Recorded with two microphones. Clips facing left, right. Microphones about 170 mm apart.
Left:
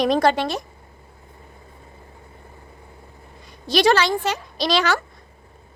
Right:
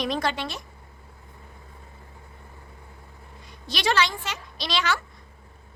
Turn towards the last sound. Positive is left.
turn(degrees=40)  # may be behind; listen again after turning